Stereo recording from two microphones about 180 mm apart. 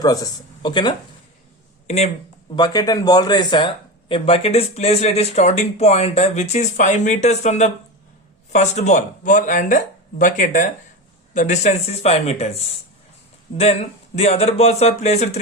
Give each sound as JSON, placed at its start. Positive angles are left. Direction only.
{"t": 0.0, "sound": "speech", "side_deg": 20}
{"t": 2.6, "sound": "speech", "side_deg": 20}